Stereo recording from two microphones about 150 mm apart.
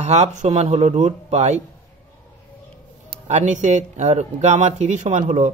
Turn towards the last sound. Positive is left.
turn(degrees=-50)  # may be behind; listen again after turning